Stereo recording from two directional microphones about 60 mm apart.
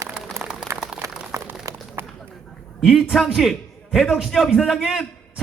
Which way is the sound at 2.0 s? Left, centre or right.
Right.